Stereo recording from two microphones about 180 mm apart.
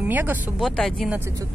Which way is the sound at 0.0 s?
10° right (ahead or behind).